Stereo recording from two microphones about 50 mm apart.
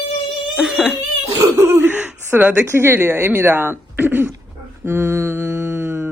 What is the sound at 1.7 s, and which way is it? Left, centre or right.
Speech, right.